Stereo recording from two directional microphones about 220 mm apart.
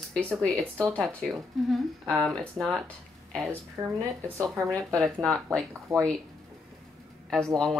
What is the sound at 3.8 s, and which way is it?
Speech, 15° right (ahead or behind).